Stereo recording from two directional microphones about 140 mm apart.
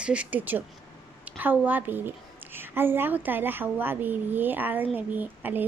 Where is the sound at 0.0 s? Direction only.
10° right (ahead or behind).